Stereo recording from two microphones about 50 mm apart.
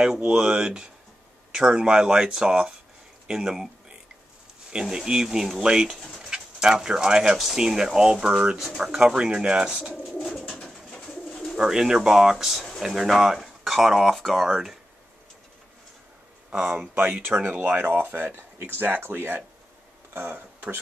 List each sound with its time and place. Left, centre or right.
0.0 s speech: centre
4.9 s speech: centre
6.1 s bird: centre
7.3 s speech: centre
10.6 s bird: centre
11.5 s speech: centre
16.4 s speech: right
16.9 s speech: right